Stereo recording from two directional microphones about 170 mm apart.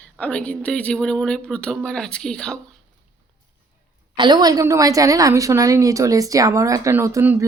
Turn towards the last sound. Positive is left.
turn(degrees=-15)  # may be behind; listen again after turning